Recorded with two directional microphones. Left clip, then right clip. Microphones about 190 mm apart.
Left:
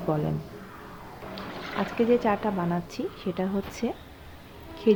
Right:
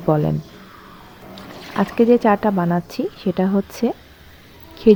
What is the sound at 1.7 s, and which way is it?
A woman's voice, 45° right (ahead or behind).